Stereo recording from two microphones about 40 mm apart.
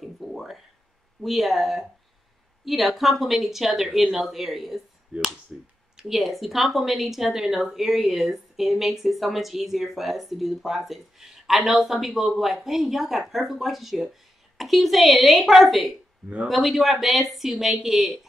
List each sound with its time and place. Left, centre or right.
0.2 s a sound: centre
1.2 s a woman's voice: centre
5.1 s finger snapping: centre
6.1 s a woman's voice: centre